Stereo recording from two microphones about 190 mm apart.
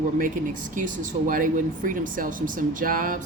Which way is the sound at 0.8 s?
45° right (ahead or behind).